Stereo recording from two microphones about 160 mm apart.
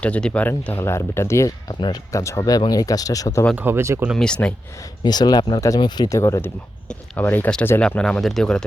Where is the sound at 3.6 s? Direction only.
15° right (ahead or behind).